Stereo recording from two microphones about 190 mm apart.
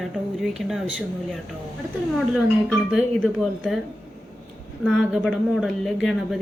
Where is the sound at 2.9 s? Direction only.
Centre (ahead or behind).